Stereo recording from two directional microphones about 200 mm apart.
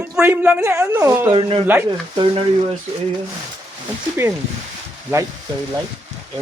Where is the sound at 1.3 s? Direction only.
25° right (ahead or behind).